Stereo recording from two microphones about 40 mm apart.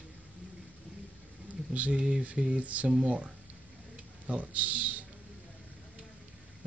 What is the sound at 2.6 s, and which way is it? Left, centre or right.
Speech, right.